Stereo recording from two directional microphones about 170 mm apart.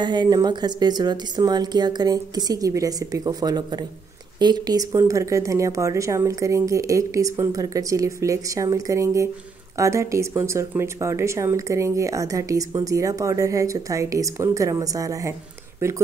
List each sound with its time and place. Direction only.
0.0 s speech: 25° right (ahead or behind)